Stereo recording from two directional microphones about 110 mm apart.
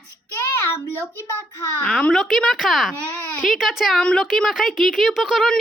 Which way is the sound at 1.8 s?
10° left (ahead or behind).